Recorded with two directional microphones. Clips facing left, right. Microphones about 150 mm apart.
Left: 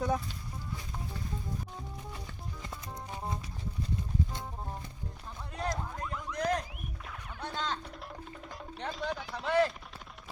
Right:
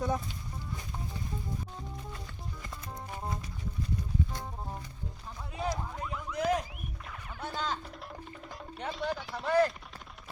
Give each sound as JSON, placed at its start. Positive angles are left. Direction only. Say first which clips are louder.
{"t": 2.2, "sound": "music", "louder": "even", "side_deg": 20}
{"t": 5.5, "sound": "music", "louder": "right 1 dB", "side_deg": 0}